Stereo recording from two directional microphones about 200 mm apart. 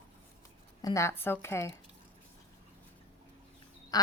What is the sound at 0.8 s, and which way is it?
Speech, 15° left (ahead or behind).